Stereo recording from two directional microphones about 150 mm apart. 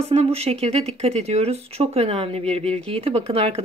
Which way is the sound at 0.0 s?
45° right (ahead or behind).